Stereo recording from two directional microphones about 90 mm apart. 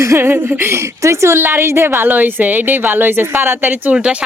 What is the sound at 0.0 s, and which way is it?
A woman's voice, 30° right (ahead or behind).